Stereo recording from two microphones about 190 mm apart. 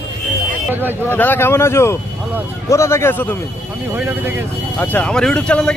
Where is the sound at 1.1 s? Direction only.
10° left (ahead or behind).